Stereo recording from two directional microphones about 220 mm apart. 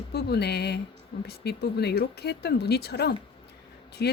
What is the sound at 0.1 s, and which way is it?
Speech, 45° left (ahead or behind).